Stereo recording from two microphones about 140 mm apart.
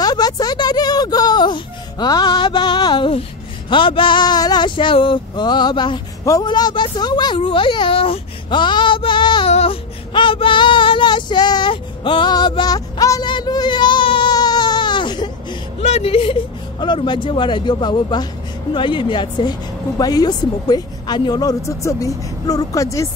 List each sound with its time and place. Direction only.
0.0 s a sound: 30° left (ahead or behind)
3.7 s male singing: 35° left (ahead or behind)
9.5 s child singing: 45° left (ahead or behind)
15.8 s speech: 50° left (ahead or behind); by 18.2 s 35° left (ahead or behind)
18.7 s male singing: 35° left (ahead or behind)
20.0 s a woman's voice: 30° left (ahead or behind)